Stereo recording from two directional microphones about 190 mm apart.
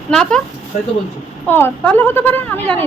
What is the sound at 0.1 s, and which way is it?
Speech, 5° left (ahead or behind).